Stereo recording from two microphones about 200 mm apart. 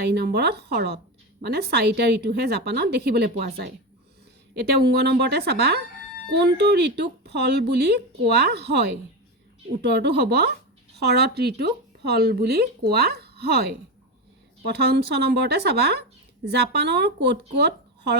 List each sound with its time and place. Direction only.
0.0 s speech: 55° right (ahead or behind)
4.5 s speech: 55° right (ahead or behind)
14.7 s speech: 55° right (ahead or behind)